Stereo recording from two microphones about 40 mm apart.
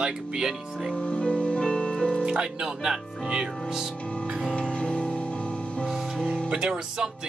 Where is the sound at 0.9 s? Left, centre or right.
Left.